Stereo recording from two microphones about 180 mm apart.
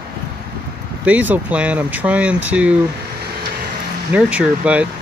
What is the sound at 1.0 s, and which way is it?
Speech, 10° right (ahead or behind).